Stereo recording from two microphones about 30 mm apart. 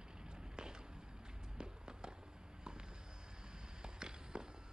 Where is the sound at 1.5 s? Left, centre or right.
Right.